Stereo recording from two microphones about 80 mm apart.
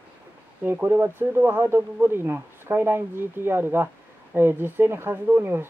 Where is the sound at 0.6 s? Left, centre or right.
Right.